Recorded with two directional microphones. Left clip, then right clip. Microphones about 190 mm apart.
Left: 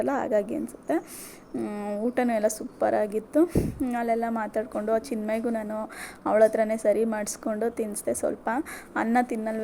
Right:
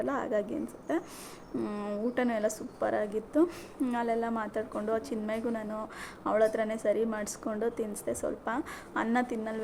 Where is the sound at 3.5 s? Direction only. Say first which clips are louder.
Left 6 dB; 10° left (ahead or behind).